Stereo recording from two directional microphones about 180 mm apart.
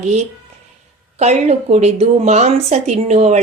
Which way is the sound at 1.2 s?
40° right (ahead or behind).